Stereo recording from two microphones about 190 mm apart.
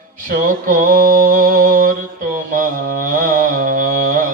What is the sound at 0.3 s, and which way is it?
Mantra, 45° right (ahead or behind).